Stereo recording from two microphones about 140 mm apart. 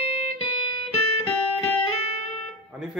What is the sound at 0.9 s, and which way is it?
Music, 45° left (ahead or behind).